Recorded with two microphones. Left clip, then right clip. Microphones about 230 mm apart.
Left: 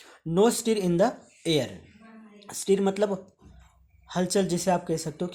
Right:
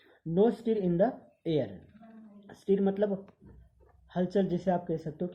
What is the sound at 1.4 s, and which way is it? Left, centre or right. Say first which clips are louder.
Speech: left 5 dB; left.